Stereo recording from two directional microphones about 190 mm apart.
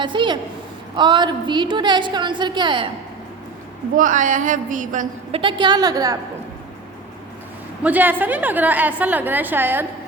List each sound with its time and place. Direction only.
0.0 s a woman's voice: 25° right (ahead or behind)
3.9 s a woman's voice: 45° right (ahead or behind)
5.4 s a woman's voice: 25° right (ahead or behind)
7.9 s a woman's voice: 10° right (ahead or behind)